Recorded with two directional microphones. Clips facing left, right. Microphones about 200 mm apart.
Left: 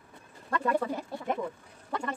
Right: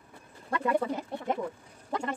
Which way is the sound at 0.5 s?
15° right (ahead or behind).